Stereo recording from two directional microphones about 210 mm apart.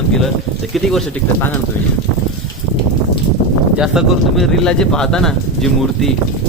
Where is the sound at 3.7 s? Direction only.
Centre (ahead or behind).